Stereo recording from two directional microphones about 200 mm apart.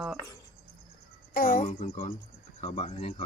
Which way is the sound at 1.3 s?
45° left (ahead or behind).